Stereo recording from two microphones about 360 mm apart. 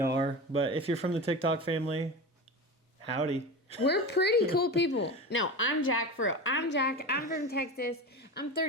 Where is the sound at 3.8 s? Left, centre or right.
Left.